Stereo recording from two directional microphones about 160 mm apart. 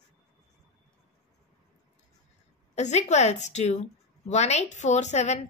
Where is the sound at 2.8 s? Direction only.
45° left (ahead or behind).